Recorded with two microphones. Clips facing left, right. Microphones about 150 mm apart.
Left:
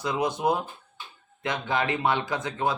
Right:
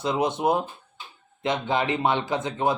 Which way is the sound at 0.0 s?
25° right (ahead or behind).